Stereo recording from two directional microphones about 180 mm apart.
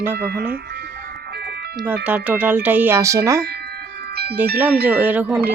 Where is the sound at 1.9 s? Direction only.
10° right (ahead or behind).